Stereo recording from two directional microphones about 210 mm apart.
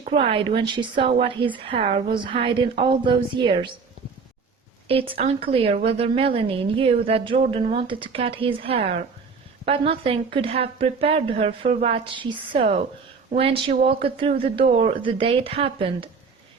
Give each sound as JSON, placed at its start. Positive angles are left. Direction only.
{"t": 0.0, "sound": "a woman's voice", "side_deg": -25}
{"t": 4.9, "sound": "a woman's voice", "side_deg": -25}